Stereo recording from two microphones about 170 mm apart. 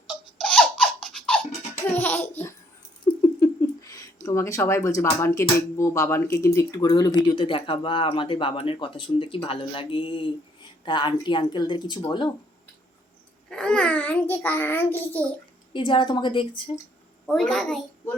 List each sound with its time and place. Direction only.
0.3 s laughter: 5° left (ahead or behind)
1.9 s a child's voice: 10° left (ahead or behind); by 11.9 s 25° left (ahead or behind)
13.5 s a child's voice: 5° left (ahead or behind)
15.7 s speech: 30° left (ahead or behind)
17.2 s a child's voice: centre (ahead or behind)